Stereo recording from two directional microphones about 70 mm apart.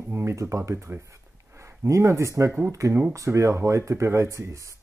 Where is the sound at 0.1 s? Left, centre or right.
Right.